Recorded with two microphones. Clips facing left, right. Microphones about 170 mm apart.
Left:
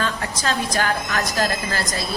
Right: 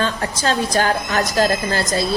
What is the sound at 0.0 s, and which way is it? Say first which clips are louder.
A woman's voice: right 4 dB; 30° right (ahead or behind).